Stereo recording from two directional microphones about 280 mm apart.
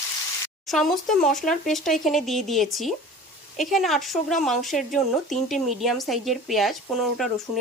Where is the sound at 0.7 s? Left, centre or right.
Centre.